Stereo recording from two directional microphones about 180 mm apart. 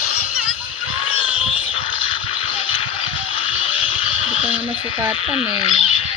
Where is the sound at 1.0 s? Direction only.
30° left (ahead or behind).